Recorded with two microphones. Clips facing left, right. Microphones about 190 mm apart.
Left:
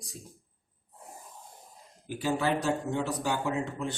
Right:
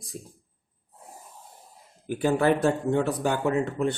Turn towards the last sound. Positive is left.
turn(degrees=-60)  # may be behind; listen again after turning